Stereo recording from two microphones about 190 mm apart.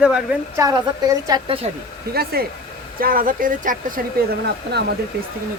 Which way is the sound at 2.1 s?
55° right (ahead or behind).